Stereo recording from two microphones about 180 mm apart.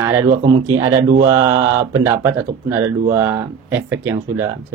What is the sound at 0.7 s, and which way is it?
Speech, 20° right (ahead or behind).